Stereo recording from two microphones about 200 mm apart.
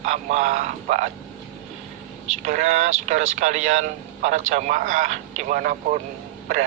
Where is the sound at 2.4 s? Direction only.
35° right (ahead or behind).